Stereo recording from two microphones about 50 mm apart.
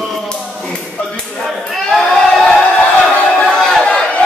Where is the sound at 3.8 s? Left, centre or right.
Left.